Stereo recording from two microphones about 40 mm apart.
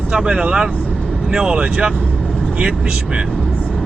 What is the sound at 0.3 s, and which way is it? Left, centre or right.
Speech, right.